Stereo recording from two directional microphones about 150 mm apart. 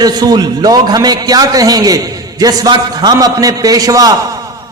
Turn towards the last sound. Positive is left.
turn(degrees=-25)  # may be behind; listen again after turning